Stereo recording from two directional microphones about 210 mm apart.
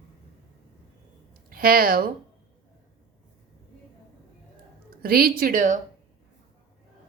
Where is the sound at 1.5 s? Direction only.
45° right (ahead or behind).